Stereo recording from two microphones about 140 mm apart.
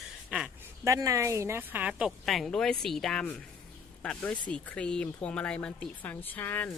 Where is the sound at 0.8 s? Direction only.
25° right (ahead or behind).